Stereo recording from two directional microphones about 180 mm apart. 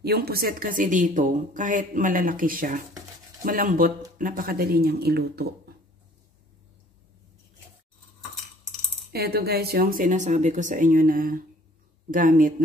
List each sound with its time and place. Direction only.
0.0 s a woman's voice: 60° right (ahead or behind)
9.1 s a woman's voice: 60° right (ahead or behind)